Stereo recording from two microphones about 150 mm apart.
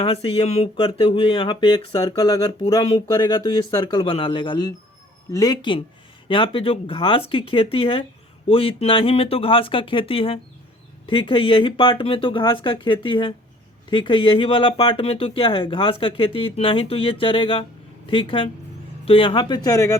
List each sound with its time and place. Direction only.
0.0 s speech: 40° left (ahead or behind); by 20.0 s 20° left (ahead or behind)